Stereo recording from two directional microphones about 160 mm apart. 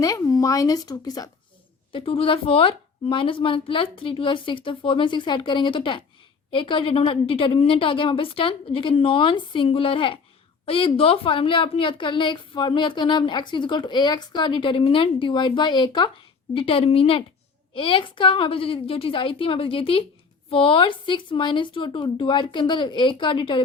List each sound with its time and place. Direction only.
0.0 s speech: 20° left (ahead or behind)
1.9 s a woman's voice: 35° left (ahead or behind)